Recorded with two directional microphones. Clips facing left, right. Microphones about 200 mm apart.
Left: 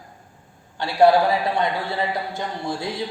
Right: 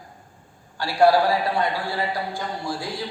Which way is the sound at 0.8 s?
20° left (ahead or behind).